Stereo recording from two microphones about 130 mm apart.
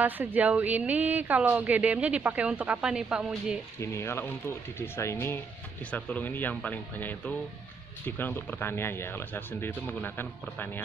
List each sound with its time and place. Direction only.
0.0 s speech: 15° right (ahead or behind)
3.8 s speech: 20° left (ahead or behind)